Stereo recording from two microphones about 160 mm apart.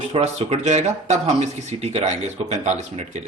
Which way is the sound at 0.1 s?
40° right (ahead or behind).